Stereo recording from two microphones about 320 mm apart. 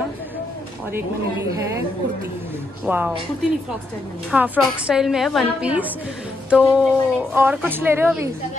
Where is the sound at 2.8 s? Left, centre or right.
Centre.